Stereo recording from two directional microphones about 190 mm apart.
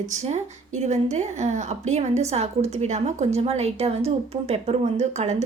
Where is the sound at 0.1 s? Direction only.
35° right (ahead or behind).